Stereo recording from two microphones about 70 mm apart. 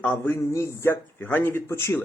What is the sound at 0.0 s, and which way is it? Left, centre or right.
Speech, left.